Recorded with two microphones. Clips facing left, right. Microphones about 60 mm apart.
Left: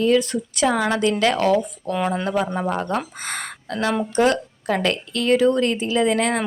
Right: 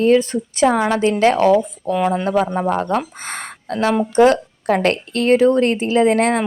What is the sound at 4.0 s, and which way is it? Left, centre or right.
Speech, right.